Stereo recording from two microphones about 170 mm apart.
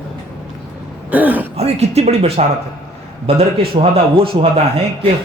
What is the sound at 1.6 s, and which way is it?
Speech, 40° right (ahead or behind).